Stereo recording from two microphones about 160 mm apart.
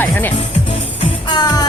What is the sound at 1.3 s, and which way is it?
Music, 25° left (ahead or behind).